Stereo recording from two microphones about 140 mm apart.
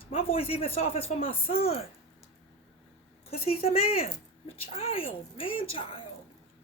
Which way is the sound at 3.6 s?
45° left (ahead or behind).